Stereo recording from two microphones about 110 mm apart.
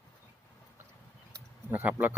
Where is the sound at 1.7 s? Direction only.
15° right (ahead or behind).